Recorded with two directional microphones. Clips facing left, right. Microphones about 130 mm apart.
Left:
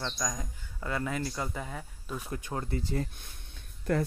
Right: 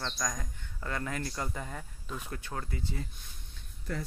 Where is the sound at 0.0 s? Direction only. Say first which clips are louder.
Left 1 dB; 10° left (ahead or behind).